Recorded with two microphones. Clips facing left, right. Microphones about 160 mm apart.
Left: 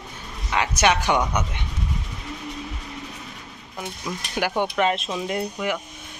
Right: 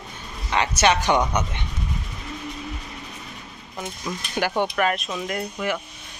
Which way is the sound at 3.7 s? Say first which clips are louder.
Even; 5° left (ahead or behind).